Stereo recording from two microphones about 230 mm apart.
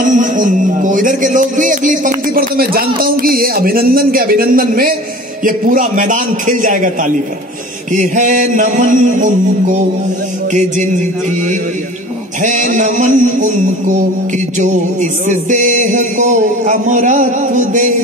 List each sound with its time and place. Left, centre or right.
0.0 s music: right